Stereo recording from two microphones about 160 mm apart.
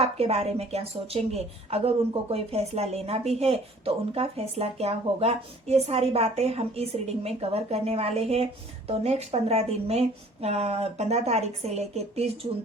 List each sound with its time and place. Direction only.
0.0 s speech: 40° right (ahead or behind)